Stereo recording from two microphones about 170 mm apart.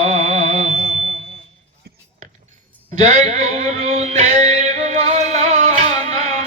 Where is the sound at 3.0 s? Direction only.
40° right (ahead or behind).